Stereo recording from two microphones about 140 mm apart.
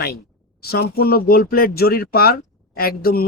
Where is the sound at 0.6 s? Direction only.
90° left.